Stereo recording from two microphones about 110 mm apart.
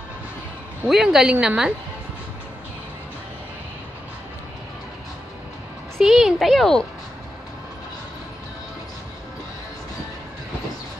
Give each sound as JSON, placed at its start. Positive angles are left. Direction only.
{"t": 0.8, "sound": "a woman's voice", "side_deg": -5}
{"t": 5.9, "sound": "a woman's voice", "side_deg": -5}